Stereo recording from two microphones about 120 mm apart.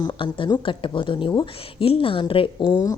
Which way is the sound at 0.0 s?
45° left (ahead or behind).